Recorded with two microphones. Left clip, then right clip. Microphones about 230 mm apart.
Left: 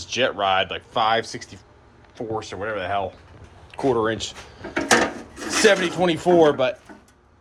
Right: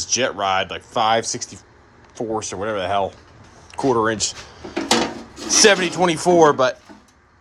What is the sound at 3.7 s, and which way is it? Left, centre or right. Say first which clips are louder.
Speech: right 3 dB; centre.